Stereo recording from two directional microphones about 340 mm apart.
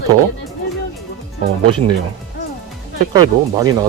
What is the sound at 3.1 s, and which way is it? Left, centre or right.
Speech, centre.